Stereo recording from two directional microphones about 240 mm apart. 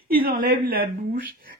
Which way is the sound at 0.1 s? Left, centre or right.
Right.